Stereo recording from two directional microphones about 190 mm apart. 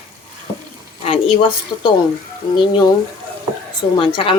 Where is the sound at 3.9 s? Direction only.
25° left (ahead or behind).